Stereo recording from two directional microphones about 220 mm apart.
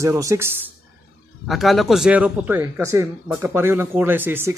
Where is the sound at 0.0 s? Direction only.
15° right (ahead or behind).